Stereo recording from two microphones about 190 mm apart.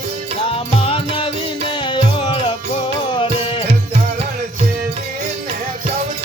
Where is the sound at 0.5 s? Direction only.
30° left (ahead or behind).